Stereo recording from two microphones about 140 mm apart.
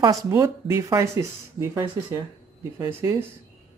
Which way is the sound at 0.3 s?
20° right (ahead or behind).